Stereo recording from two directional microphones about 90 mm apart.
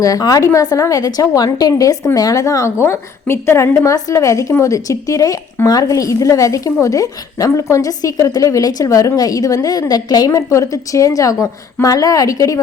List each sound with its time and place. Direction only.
0.0 s a woman's voice: 40° left (ahead or behind)